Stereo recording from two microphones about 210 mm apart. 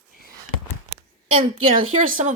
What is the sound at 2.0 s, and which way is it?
Speech, 40° right (ahead or behind).